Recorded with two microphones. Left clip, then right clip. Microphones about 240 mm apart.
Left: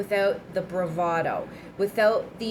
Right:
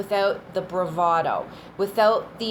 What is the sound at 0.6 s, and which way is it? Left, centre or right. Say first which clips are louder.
Speech: right 3 dB; right.